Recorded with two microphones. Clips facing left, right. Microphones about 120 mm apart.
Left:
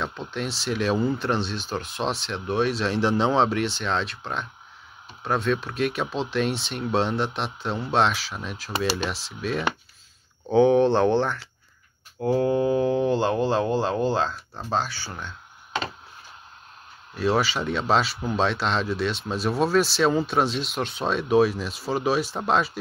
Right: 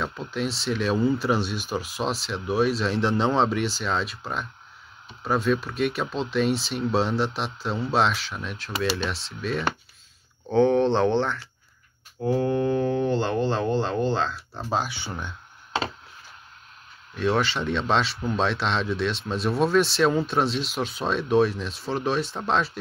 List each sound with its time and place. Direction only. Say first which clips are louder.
0.3 s speech: right 3 dB; centre (ahead or behind)
12.4 s speech: left 2 dB; 10° left (ahead or behind)
14.9 s speech: right 2 dB; 20° right (ahead or behind)
17.1 s speech: left 1 dB; 5° left (ahead or behind)